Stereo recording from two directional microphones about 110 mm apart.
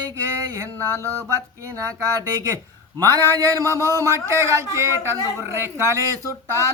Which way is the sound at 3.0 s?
35° right (ahead or behind).